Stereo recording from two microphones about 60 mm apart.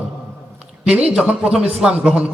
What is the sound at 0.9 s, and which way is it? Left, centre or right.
A man's voice, centre.